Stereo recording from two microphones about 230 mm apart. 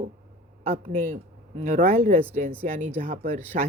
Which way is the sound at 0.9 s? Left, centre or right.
Right.